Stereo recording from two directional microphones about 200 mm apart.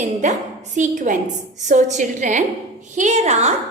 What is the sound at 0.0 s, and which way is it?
A woman's voice, 35° right (ahead or behind).